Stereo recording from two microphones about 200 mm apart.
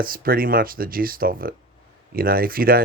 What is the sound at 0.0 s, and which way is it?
Speech, 45° right (ahead or behind).